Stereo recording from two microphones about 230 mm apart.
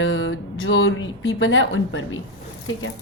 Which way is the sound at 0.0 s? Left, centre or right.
Left.